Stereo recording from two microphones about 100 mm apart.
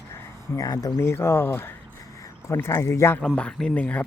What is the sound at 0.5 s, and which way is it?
Speech, 40° left (ahead or behind).